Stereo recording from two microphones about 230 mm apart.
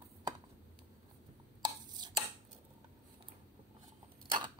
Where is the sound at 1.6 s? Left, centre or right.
Centre.